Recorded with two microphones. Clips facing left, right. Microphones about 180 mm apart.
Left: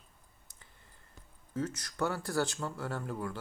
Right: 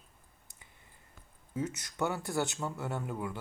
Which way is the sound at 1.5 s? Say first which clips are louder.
Even; 10° right (ahead or behind).